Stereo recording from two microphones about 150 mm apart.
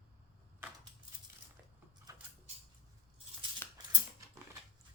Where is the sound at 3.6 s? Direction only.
15° left (ahead or behind).